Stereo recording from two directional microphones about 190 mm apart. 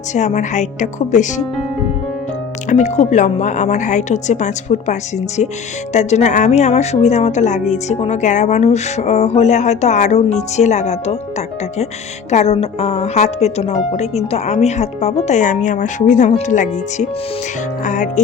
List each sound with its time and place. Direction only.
0.1 s a woman's voice: 40° left (ahead or behind)
2.6 s a woman's voice: 40° left (ahead or behind)